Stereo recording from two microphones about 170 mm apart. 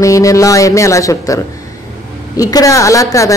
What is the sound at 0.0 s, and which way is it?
A woman's voice, 20° left (ahead or behind).